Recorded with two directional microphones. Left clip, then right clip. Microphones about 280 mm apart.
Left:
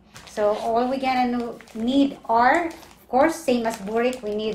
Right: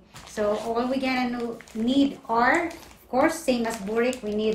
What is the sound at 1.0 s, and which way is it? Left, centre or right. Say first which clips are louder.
A woman's voice: left 4 dB; centre.